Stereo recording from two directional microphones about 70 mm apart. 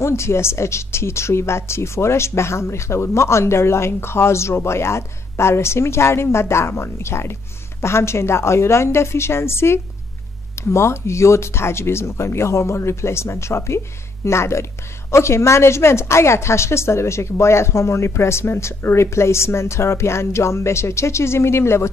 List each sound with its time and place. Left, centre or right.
0.0 s speech: left